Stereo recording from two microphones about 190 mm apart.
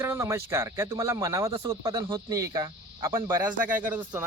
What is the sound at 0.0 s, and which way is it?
Speech, 15° right (ahead or behind).